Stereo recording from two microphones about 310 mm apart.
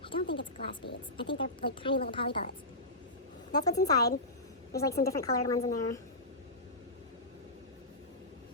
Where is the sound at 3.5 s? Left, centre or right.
Centre.